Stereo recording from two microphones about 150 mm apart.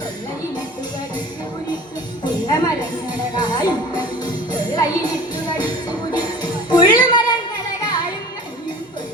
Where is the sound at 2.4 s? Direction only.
30° left (ahead or behind).